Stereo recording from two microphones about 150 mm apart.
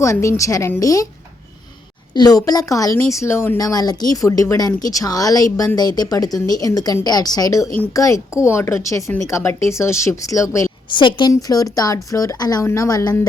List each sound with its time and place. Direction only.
0.0 s speech: 20° left (ahead or behind)
2.1 s speech: 25° left (ahead or behind)
10.8 s speech: 30° left (ahead or behind)